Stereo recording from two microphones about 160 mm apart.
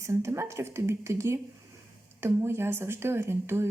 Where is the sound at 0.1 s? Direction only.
15° right (ahead or behind).